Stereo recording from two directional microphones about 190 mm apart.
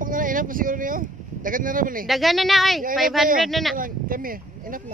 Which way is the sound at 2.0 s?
Centre (ahead or behind).